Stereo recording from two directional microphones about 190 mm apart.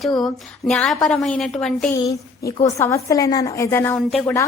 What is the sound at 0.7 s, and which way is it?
A woman's voice, 5° left (ahead or behind).